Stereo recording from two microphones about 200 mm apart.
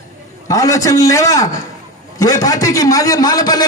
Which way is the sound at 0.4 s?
15° left (ahead or behind).